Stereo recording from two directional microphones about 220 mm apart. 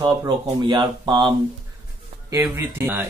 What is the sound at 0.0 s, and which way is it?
Speech, 20° right (ahead or behind).